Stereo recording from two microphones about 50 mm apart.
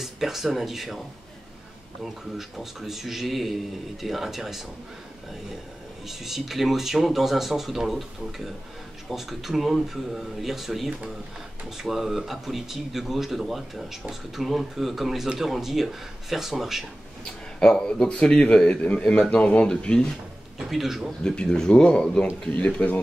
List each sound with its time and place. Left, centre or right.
0.0 s speech: centre
2.3 s speech: centre
6.0 s speech: centre
17.2 s a sound: centre
18.0 s speech: left
20.5 s speech: centre
21.2 s speech: centre
22.8 s speech: left